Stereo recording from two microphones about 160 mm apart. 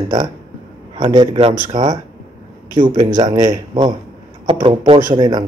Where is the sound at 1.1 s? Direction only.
30° right (ahead or behind).